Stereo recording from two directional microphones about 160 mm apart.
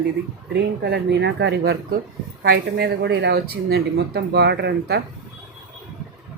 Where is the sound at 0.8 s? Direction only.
90° right.